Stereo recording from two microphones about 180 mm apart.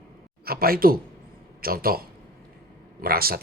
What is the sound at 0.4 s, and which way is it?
Speech, 55° right (ahead or behind).